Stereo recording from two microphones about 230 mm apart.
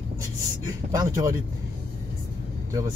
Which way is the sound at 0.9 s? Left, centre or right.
Centre.